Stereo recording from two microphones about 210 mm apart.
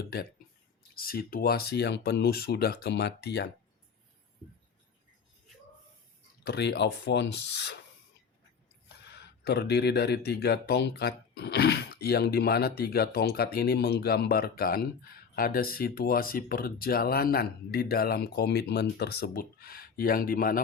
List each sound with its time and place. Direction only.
0.0 s speech: 45° left (ahead or behind)
6.4 s speech: 50° left (ahead or behind)
9.0 s speech: 50° left (ahead or behind)